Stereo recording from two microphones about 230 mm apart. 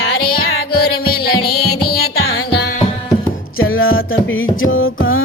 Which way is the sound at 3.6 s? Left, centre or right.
Left.